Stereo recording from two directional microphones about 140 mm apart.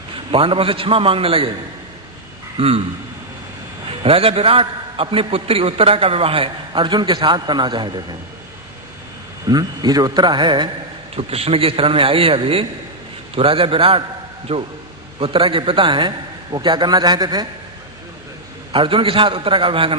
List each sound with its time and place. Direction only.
0.1 s a man's voice: 40° right (ahead or behind)
2.6 s speech: 45° right (ahead or behind)
3.8 s a man's voice: 40° right (ahead or behind)
9.5 s a man's voice: 30° right (ahead or behind)
11.1 s a man's voice: 45° right (ahead or behind); by 17.5 s 30° right (ahead or behind)
18.7 s a man's voice: 40° right (ahead or behind)